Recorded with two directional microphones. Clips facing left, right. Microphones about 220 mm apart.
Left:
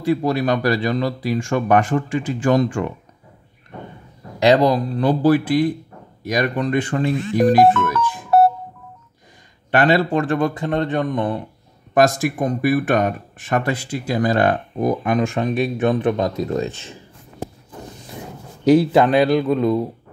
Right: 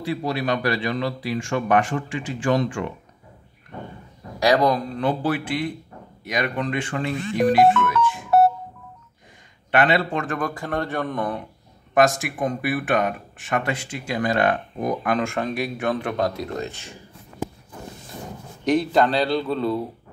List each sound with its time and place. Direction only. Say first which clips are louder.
0.0 s speech: left 6 dB; 45° left (ahead or behind)
4.4 s speech: left 4 dB; 25° left (ahead or behind)
9.7 s speech: left 4 dB; 40° left (ahead or behind); by 11.2 s 15° left (ahead or behind)
11.9 s speech: left 3 dB; 35° left (ahead or behind)
15.0 s speech: left 4 dB; 20° left (ahead or behind)
18.7 s speech: left 6 dB; 5° left (ahead or behind)